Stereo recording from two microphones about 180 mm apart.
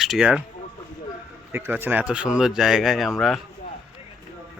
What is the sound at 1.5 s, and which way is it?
Speech, 10° right (ahead or behind).